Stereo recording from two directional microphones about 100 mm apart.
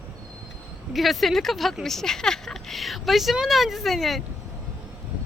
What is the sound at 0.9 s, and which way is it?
Speech, centre (ahead or behind).